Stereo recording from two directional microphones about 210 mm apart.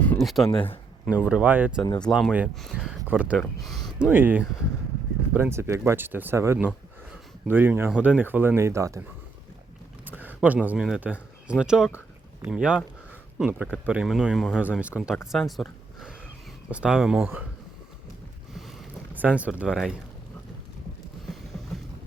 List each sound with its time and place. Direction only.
0.0 s a sound: 5° left (ahead or behind)
0.4 s speech: 25° left (ahead or behind)
1.1 s speech: 5° right (ahead or behind)
10.1 s speech: 10° right (ahead or behind)
19.1 s speech: 5° right (ahead or behind)